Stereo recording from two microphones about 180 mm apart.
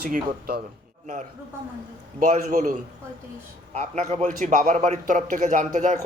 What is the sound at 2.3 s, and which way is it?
Speech, 45° right (ahead or behind).